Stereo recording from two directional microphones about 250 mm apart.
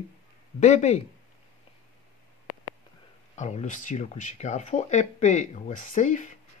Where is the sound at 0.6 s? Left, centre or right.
Left.